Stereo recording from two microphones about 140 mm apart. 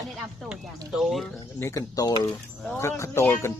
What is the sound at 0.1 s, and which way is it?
Speech, 5° right (ahead or behind).